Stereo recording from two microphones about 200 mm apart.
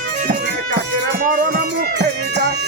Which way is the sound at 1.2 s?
45° right (ahead or behind).